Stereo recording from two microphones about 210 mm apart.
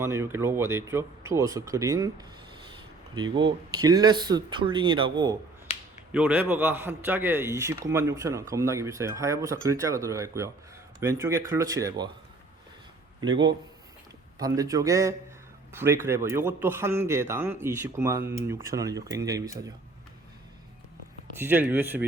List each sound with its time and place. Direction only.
0.0 s a man's voice: 10° right (ahead or behind)
6.1 s a man's voice: 5° right (ahead or behind)
13.2 s a man's voice: 20° right (ahead or behind)
21.3 s a man's voice: 10° right (ahead or behind)